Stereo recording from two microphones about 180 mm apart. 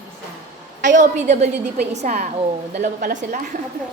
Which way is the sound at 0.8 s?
45° right (ahead or behind).